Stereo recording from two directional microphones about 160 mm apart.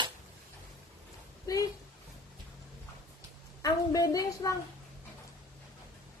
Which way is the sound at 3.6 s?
20° left (ahead or behind).